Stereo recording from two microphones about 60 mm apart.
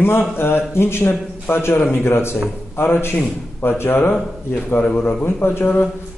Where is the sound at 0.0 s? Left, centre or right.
Left.